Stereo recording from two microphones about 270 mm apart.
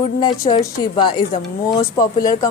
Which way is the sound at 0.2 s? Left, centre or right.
Centre.